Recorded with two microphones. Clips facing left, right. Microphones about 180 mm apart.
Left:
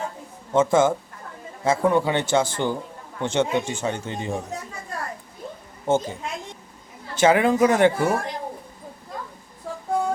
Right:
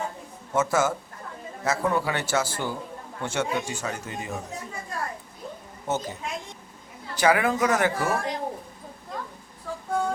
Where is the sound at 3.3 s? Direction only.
25° left (ahead or behind).